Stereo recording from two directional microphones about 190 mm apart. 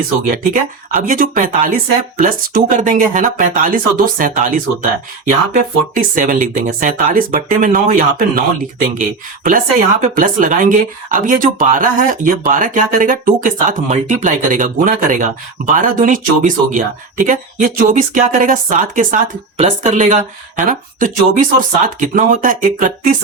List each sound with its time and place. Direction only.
0.3 s speech: 45° right (ahead or behind)